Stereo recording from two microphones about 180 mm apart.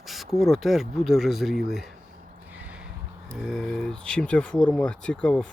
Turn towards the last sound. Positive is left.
turn(degrees=5)  # may be behind; listen again after turning